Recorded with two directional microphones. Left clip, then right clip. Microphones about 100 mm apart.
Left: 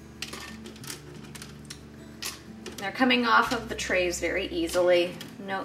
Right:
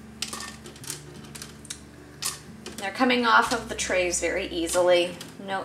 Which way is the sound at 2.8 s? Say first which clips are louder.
Right 2 dB; 15° right (ahead or behind).